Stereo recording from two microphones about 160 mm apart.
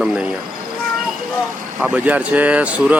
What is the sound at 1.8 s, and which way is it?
Speech, 10° right (ahead or behind).